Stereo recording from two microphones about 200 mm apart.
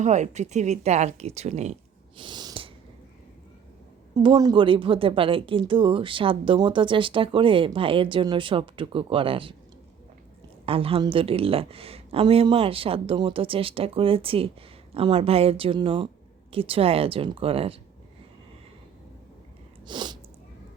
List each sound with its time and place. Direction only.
0.0 s speech: 35° right (ahead or behind)
2.1 s a sound: 20° right (ahead or behind)
4.1 s a woman's voice: 20° right (ahead or behind)
10.7 s a woman's voice: 30° right (ahead or behind)
19.9 s a woman's voice: 20° right (ahead or behind)